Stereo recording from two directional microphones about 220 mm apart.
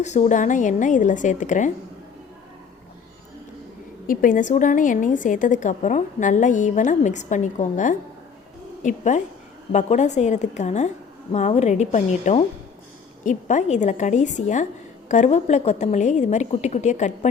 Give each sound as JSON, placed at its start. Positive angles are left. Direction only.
{"t": 0.0, "sound": "a woman's voice", "side_deg": 30}
{"t": 4.0, "sound": "a woman's voice", "side_deg": 40}